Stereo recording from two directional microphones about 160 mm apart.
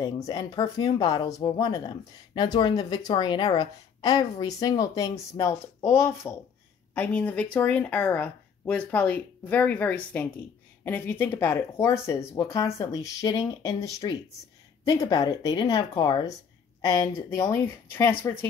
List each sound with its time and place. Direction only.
0.0 s speech: 25° left (ahead or behind)
17.3 s speech: 15° left (ahead or behind)